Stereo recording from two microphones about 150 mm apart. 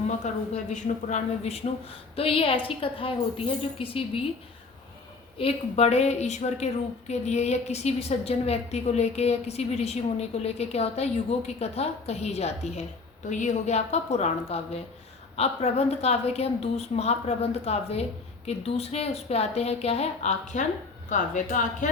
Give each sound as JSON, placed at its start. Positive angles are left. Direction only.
{"t": 0.5, "sound": "a woman's voice", "side_deg": 55}
{"t": 5.4, "sound": "a woman's voice", "side_deg": 40}